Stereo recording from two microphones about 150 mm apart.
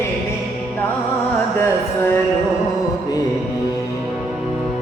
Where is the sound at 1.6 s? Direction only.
15° left (ahead or behind).